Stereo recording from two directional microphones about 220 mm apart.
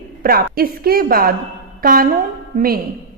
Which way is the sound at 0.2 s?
40° right (ahead or behind).